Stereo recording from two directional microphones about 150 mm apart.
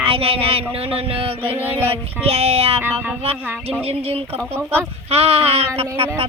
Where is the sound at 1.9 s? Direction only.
40° right (ahead or behind).